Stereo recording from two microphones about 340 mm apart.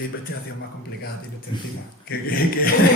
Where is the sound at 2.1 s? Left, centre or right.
Left.